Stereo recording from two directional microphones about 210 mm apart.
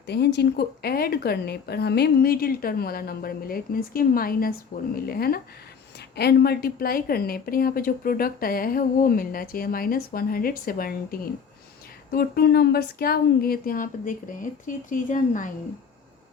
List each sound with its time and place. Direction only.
0.1 s a woman's voice: 55° left (ahead or behind); by 15.4 s 40° left (ahead or behind)